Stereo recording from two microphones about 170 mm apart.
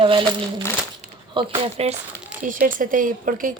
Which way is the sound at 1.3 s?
35° right (ahead or behind).